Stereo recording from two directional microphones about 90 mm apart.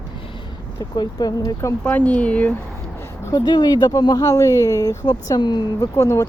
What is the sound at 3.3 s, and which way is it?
Speech, 50° left (ahead or behind).